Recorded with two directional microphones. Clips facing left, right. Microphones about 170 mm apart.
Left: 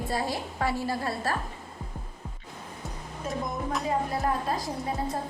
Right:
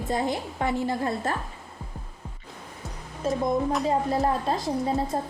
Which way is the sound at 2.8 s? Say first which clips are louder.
Right 7 dB; centre (ahead or behind).